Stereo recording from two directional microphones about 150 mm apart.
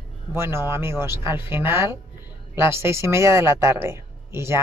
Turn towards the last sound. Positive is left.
turn(degrees=-15)  # may be behind; listen again after turning